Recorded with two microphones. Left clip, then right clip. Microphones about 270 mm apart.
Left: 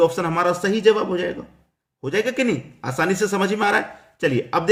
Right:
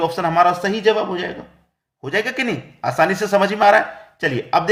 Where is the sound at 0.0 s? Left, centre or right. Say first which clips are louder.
Right 3 dB; centre.